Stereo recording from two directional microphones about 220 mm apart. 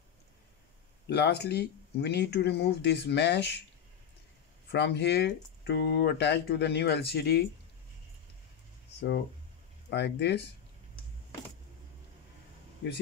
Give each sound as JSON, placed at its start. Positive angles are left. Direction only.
{"t": 1.0, "sound": "speech", "side_deg": 50}
{"t": 4.6, "sound": "speech", "side_deg": 50}
{"t": 9.8, "sound": "speech", "side_deg": 50}